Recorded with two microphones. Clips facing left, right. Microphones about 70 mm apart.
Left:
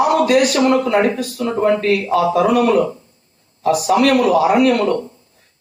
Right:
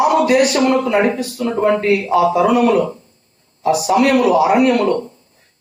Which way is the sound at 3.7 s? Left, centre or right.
Centre.